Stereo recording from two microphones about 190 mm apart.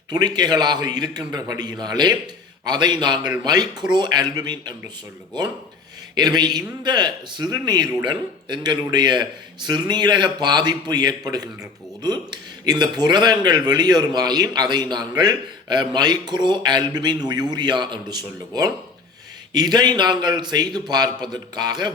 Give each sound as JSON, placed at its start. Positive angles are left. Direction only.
{"t": 0.1, "sound": "a man's voice", "side_deg": -20}
{"t": 6.1, "sound": "a man's voice", "side_deg": -20}